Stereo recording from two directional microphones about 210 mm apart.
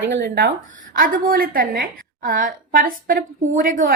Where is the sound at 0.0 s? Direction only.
55° right (ahead or behind).